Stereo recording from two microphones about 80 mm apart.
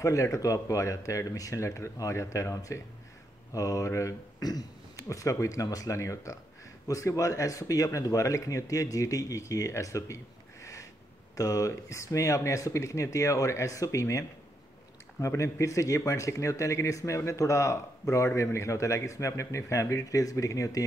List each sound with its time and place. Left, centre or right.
0.0 s speech: left
4.4 s speech: left